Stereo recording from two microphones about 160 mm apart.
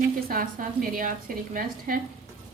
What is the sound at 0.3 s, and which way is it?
Speech, 60° right (ahead or behind).